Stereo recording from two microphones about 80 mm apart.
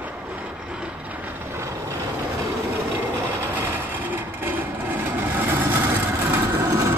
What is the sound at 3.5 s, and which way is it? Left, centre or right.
Vehicle, right.